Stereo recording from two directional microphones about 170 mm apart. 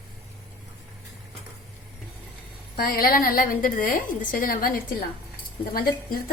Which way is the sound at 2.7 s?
60° left (ahead or behind).